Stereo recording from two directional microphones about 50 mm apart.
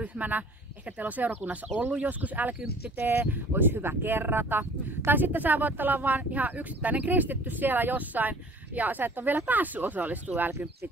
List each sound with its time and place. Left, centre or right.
0.0 s speech: right
3.3 s speech: right